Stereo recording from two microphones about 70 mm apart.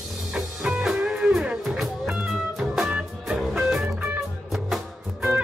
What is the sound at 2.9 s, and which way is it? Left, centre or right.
Music, centre.